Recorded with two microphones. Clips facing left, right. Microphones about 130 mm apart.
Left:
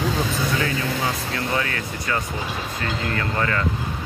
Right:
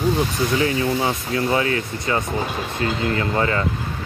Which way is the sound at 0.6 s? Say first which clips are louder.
Right 4 dB; 25° right (ahead or behind).